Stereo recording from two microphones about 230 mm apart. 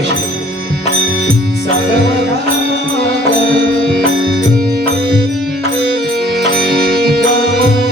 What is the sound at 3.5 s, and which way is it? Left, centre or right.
Music, right.